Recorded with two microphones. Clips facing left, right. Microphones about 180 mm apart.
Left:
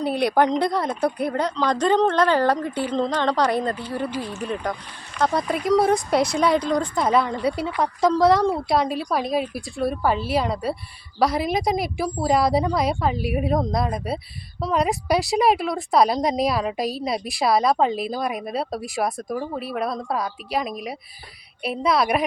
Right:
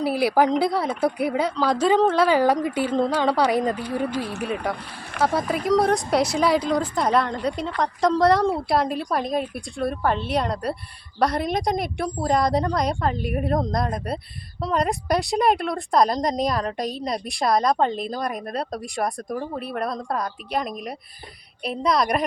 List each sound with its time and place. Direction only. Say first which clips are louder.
0.0 s a woman's voice: even; 5° right (ahead or behind)
4.2 s speech: right 1 dB; 65° right (ahead or behind)
5.2 s speech: even; 5° right (ahead or behind)